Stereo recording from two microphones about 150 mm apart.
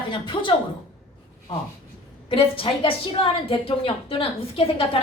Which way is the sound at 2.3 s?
35° left (ahead or behind).